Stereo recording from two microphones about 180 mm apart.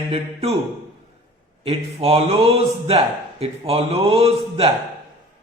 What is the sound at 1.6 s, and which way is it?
Speech, 35° right (ahead or behind).